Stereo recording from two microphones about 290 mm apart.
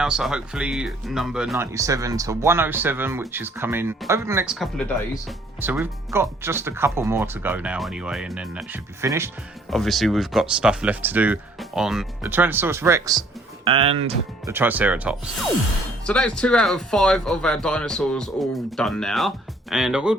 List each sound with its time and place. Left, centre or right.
0.0 s speech: centre
14.5 s speech: centre